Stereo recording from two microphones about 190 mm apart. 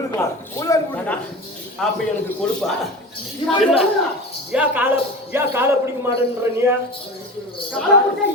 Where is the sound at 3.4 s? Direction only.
25° left (ahead or behind).